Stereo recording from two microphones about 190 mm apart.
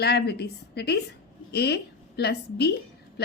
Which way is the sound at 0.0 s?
60° left (ahead or behind).